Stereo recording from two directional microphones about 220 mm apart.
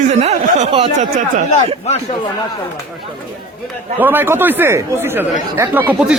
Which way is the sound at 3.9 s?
10° right (ahead or behind).